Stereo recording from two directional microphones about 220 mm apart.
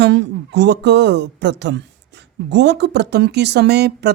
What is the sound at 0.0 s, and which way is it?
Speech, 50° right (ahead or behind).